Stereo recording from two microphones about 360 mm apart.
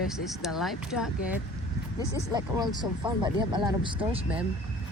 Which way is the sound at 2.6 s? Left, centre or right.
Centre.